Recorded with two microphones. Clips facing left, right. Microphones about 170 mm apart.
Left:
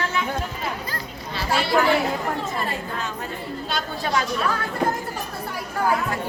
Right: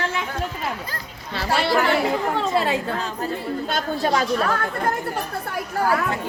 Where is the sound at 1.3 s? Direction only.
65° right (ahead or behind).